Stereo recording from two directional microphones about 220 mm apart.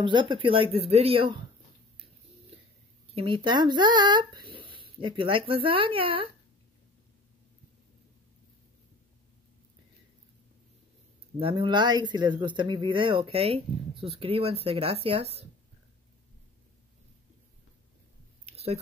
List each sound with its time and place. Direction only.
0.0 s speech: 20° right (ahead or behind)
3.2 s speech: 20° right (ahead or behind)
11.3 s speech: 25° right (ahead or behind)
18.4 s a sound: 30° right (ahead or behind)